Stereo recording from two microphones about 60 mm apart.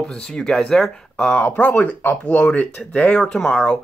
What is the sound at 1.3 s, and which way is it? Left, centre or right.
Speech, left.